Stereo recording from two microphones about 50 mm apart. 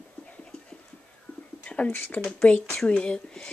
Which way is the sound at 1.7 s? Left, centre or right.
Left.